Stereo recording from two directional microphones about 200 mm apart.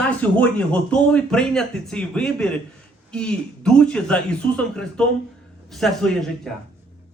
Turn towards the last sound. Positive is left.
turn(degrees=0)  # may be behind; listen again after turning